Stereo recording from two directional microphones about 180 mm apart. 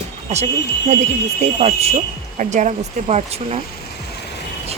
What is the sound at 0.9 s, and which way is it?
Speech, 40° right (ahead or behind).